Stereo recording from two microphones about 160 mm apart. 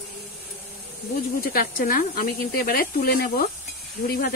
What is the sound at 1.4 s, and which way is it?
Speech, 65° left (ahead or behind).